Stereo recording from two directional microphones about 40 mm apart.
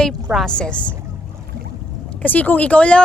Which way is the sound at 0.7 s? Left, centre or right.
Left.